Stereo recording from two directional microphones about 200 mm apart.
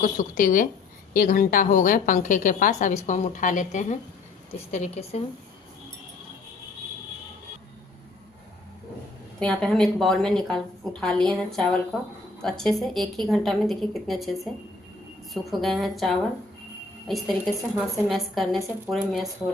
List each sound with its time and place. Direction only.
0.0 s a woman's voice: 40° left (ahead or behind)
9.4 s a woman's voice: centre (ahead or behind)